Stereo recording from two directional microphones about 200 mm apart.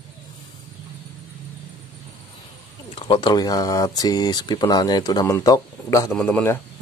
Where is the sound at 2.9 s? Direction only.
30° left (ahead or behind).